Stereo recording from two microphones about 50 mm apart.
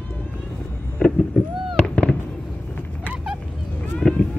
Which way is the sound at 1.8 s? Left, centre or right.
Left.